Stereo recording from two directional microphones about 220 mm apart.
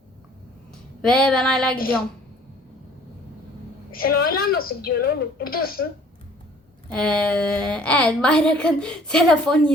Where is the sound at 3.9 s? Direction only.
45° left (ahead or behind).